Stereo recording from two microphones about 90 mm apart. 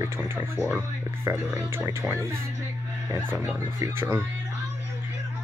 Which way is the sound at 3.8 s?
30° right (ahead or behind).